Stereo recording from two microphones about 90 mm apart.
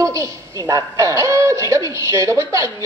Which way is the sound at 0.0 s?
40° right (ahead or behind).